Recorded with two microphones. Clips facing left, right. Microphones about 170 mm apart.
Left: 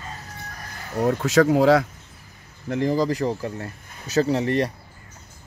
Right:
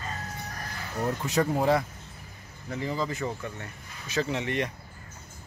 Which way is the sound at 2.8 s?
35° left (ahead or behind).